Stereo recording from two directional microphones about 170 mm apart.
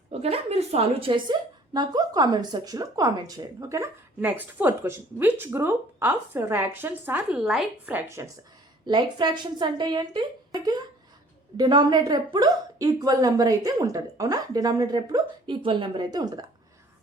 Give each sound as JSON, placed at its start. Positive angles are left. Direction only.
{"t": 0.1, "sound": "a woman's voice", "side_deg": -35}